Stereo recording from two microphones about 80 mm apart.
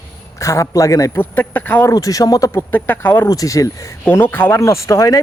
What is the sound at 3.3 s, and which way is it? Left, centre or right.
Speech, left.